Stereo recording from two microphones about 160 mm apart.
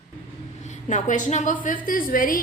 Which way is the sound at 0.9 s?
50° left (ahead or behind).